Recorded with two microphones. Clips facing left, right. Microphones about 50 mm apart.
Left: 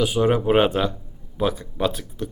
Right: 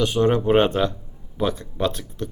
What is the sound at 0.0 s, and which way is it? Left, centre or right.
Speech, centre.